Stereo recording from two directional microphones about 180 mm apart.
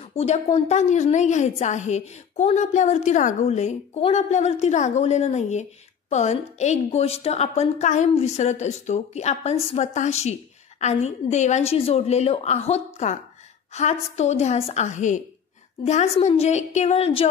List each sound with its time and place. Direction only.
0.0 s a woman's voice: 35° left (ahead or behind)